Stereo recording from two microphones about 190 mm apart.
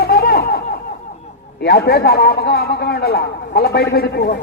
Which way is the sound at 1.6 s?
55° left (ahead or behind).